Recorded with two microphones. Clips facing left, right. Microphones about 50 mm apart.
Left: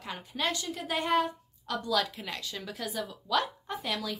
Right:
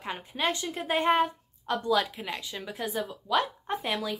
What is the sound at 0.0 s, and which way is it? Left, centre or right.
A woman's voice, right.